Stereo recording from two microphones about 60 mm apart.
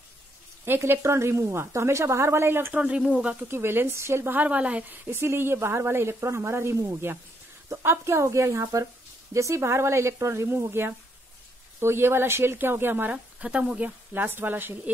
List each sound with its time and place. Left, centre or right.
0.7 s a woman's voice: right
2.7 s speech: right
3.3 s a woman's voice: right
4.3 s speech: right
4.9 s a woman's voice: right
13.4 s speech: centre; by 14.8 s right